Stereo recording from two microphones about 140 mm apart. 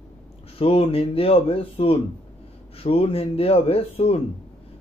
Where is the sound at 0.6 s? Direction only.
45° left (ahead or behind).